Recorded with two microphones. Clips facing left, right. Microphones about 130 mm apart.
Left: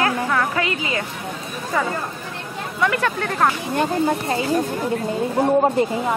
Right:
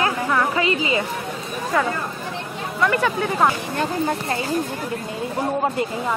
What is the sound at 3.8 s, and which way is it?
Speech, 25° left (ahead or behind).